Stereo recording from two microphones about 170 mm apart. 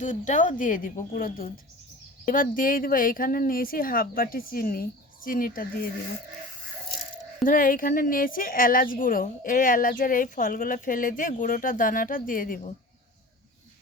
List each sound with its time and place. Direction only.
0.0 s a woman's voice: 45° left (ahead or behind)
7.4 s a woman's voice: 50° left (ahead or behind)